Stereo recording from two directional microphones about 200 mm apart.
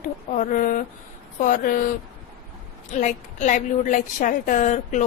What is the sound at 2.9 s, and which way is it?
A woman's voice, 35° left (ahead or behind).